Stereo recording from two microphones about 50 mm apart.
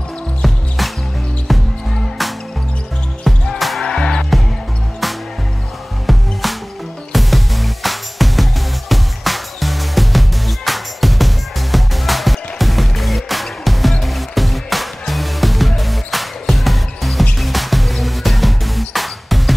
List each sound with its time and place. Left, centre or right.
0.4 s music: centre
3.3 s music: centre
3.8 s music: centre
6.1 s music: centre